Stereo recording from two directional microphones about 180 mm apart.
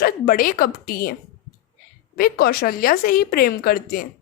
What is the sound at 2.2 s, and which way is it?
Speech, 60° left (ahead or behind).